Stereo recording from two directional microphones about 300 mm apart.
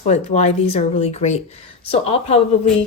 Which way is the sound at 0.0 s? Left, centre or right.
Left.